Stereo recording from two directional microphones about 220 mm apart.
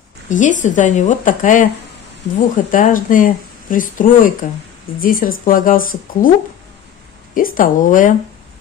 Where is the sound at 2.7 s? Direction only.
40° left (ahead or behind).